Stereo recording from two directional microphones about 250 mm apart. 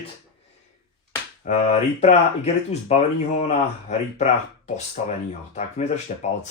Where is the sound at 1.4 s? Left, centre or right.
Left.